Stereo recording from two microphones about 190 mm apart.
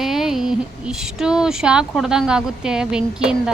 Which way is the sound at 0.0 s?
Centre (ahead or behind).